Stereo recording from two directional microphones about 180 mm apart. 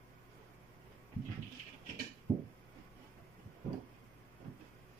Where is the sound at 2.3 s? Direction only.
10° right (ahead or behind).